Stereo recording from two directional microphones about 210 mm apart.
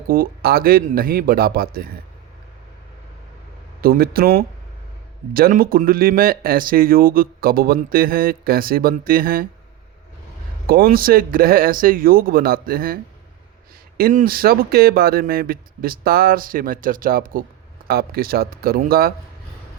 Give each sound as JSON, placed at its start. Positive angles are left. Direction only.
{"t": 0.1, "sound": "speech", "side_deg": -45}
{"t": 3.8, "sound": "speech", "side_deg": -45}
{"t": 10.7, "sound": "speech", "side_deg": -45}
{"t": 14.0, "sound": "speech", "side_deg": -40}